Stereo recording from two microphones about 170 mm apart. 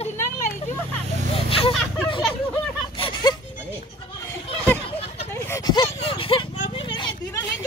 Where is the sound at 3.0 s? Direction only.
25° left (ahead or behind).